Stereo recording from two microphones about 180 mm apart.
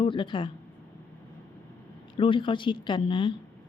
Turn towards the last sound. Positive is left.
turn(degrees=25)  # may be behind; listen again after turning